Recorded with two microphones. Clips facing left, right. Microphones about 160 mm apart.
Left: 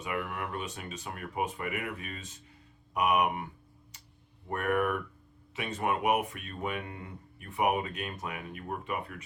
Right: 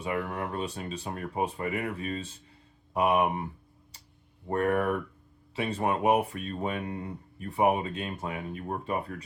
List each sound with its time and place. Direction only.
0.0 s speech: 30° right (ahead or behind)